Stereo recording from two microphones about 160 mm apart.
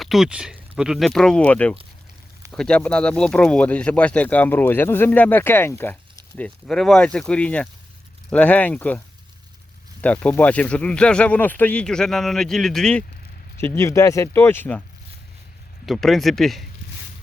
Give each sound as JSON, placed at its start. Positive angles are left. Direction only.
{"t": 0.0, "sound": "speech", "side_deg": 0}
{"t": 10.0, "sound": "speech", "side_deg": 10}
{"t": 13.6, "sound": "speech", "side_deg": 15}
{"t": 15.9, "sound": "speech", "side_deg": 0}